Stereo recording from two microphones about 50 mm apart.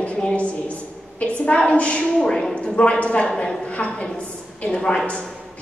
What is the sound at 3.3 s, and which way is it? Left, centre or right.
Speech, centre.